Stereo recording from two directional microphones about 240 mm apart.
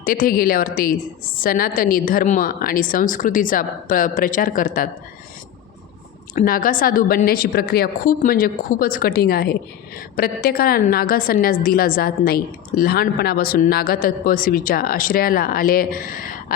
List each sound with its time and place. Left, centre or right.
0.0 s a woman's voice: left
6.3 s a woman's voice: left